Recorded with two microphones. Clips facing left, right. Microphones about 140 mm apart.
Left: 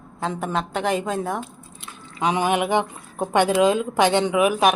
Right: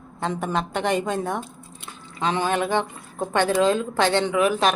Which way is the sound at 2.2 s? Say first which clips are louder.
Left 2 dB; 10° left (ahead or behind).